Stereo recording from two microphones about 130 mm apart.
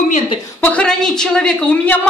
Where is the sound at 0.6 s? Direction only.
10° left (ahead or behind).